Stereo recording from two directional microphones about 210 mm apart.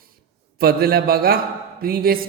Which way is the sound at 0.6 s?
45° right (ahead or behind).